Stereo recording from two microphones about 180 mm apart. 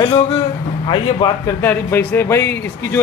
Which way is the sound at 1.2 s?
25° left (ahead or behind).